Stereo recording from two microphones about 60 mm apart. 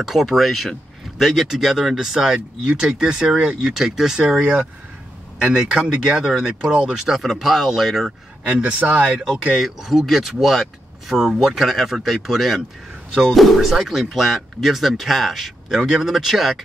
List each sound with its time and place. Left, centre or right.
0.0 s speech: centre
4.4 s speech: centre
8.5 s speech: right
9.3 s speech: centre